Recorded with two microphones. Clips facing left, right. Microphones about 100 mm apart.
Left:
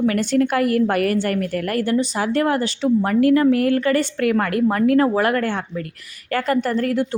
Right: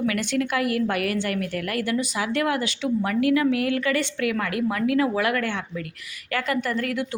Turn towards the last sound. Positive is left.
turn(degrees=35)  # may be behind; listen again after turning